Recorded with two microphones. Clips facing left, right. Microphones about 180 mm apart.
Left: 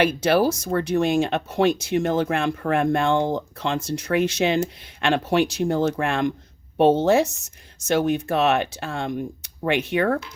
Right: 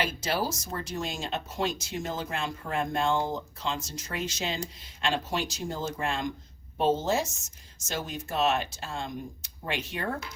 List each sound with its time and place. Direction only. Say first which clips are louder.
0.0 s speech: left 11 dB; 65° left (ahead or behind)